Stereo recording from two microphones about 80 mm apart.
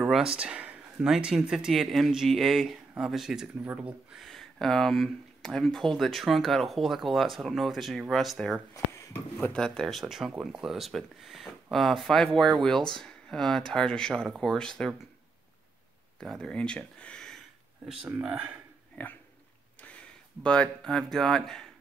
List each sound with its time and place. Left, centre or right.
0.4 s a sound: centre
1.1 s speech: centre
3.6 s speech: centre
4.1 s speech: centre
8.7 s a sound: left
9.1 s speech: centre
9.6 s speech: centre
16.2 s speech: centre
17.8 s speech: centre
19.0 s speech: centre
20.4 s speech: centre